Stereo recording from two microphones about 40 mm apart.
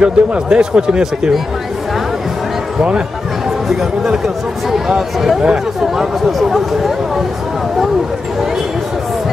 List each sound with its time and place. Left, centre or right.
0.0 s speech: right
4.6 s speech: centre